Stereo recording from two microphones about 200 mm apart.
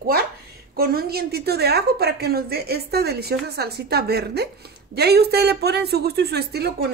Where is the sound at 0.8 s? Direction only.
50° right (ahead or behind).